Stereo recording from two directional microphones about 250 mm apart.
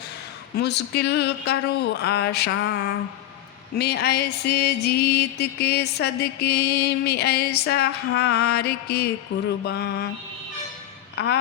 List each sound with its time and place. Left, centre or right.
0.5 s music: left
11.1 s speech: left